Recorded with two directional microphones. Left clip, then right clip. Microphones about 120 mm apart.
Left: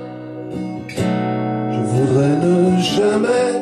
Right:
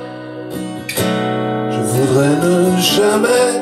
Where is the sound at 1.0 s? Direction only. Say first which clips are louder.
Right 3 dB; 25° left (ahead or behind).